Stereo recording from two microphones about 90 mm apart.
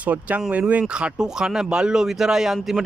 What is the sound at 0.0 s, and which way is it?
Speech, 15° right (ahead or behind).